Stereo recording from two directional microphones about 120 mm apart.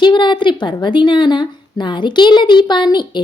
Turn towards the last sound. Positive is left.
turn(degrees=40)  # may be behind; listen again after turning